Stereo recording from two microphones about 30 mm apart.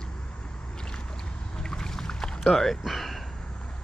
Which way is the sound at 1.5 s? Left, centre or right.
Left.